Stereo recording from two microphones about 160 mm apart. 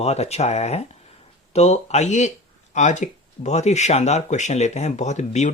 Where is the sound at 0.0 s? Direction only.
40° left (ahead or behind).